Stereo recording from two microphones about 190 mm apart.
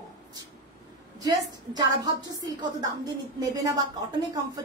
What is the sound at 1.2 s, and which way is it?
A woman's voice, 20° right (ahead or behind).